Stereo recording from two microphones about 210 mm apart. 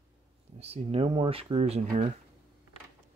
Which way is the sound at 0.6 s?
30° right (ahead or behind).